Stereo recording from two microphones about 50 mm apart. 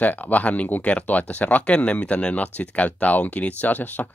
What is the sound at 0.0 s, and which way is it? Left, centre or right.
Speech, left.